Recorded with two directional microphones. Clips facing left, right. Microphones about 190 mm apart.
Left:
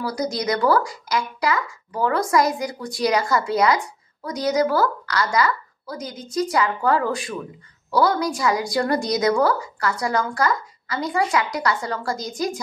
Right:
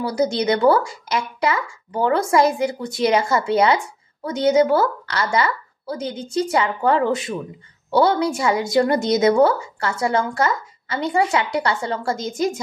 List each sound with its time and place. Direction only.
0.0 s speech: 25° right (ahead or behind)